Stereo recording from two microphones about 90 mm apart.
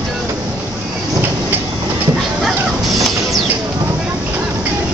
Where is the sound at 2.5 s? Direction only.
Centre (ahead or behind).